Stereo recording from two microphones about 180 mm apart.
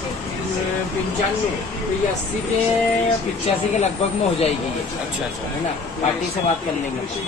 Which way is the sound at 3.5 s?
35° left (ahead or behind).